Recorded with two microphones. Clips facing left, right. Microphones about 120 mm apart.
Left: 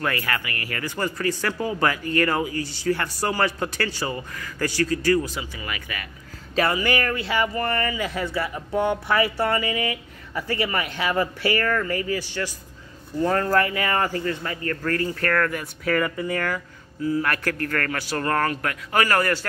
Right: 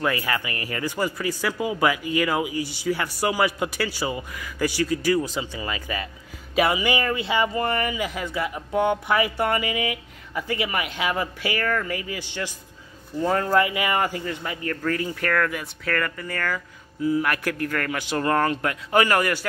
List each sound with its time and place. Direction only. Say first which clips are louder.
0.0 s speech: right 2 dB; 15° right (ahead or behind)
6.5 s speech: right 1 dB; 15° right (ahead or behind)
12.2 s a man's voice: left 2 dB; 20° right (ahead or behind)
13.2 s speech: even; 10° right (ahead or behind)
15.6 s speech: left 3 dB; 10° left (ahead or behind)
17.0 s speech: right 1 dB; 15° right (ahead or behind)